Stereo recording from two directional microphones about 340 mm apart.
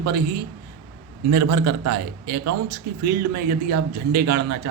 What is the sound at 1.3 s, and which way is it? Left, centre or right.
Speech, right.